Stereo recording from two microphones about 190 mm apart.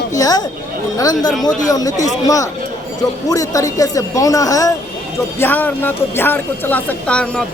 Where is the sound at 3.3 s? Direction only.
15° left (ahead or behind).